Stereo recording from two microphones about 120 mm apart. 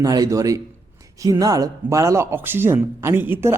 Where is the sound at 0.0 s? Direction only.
30° right (ahead or behind).